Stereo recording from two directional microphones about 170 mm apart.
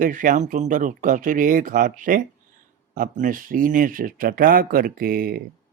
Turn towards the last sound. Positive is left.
turn(degrees=-60)  # may be behind; listen again after turning